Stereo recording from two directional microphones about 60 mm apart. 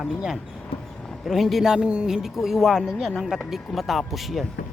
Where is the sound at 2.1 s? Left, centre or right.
Centre.